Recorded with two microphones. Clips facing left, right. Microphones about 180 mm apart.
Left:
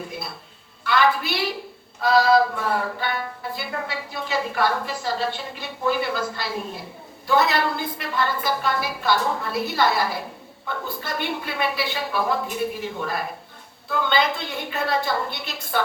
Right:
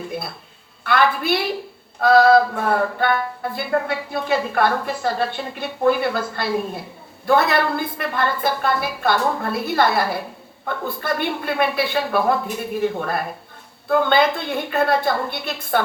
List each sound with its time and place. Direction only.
0.9 s a woman's voice: 55° right (ahead or behind)
2.0 s music: 55° right (ahead or behind)